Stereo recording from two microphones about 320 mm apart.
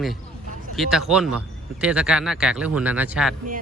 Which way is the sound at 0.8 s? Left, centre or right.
Centre.